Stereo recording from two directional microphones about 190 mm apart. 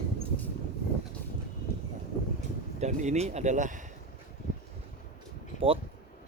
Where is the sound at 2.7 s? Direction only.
35° right (ahead or behind).